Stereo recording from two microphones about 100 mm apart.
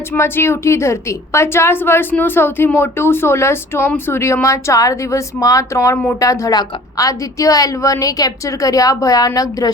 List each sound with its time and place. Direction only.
0.1 s a woman's voice: 25° left (ahead or behind)